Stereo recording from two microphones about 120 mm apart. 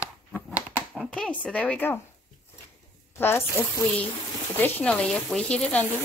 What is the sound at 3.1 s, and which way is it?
Speech, 20° left (ahead or behind).